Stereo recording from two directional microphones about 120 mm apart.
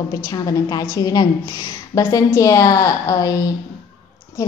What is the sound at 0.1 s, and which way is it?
A woman's voice, 30° left (ahead or behind).